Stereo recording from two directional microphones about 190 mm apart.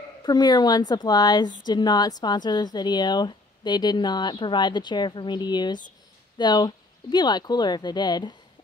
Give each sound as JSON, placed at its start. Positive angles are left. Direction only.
{"t": 0.2, "sound": "speech", "side_deg": 20}